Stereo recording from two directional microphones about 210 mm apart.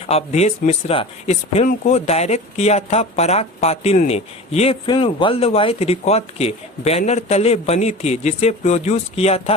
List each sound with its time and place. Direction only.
0.1 s speech: 30° left (ahead or behind)